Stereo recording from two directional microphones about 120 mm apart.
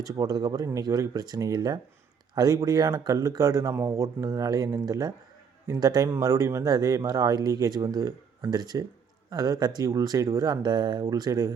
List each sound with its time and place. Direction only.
0.0 s speech: 30° right (ahead or behind)